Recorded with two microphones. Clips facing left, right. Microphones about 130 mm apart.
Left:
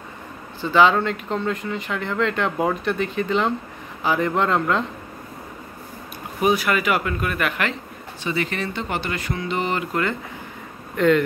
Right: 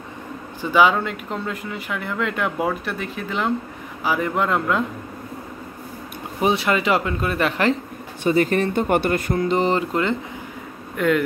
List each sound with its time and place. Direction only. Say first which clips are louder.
0.6 s speech: even; 10° right (ahead or behind)
6.4 s speech: even; 25° right (ahead or behind)
8.2 s speech: right 7 dB; 45° right (ahead or behind)
11.0 s speech: left 2 dB; 5° right (ahead or behind)